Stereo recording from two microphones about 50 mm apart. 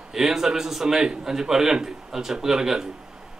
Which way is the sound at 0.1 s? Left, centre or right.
Centre.